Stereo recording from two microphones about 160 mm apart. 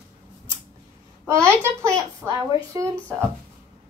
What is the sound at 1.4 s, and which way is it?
A child's voice, 15° right (ahead or behind).